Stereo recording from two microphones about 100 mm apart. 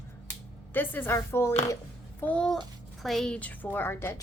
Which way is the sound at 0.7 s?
20° left (ahead or behind).